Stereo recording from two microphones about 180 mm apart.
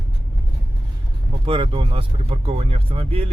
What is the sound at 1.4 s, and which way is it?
Speech, 30° right (ahead or behind).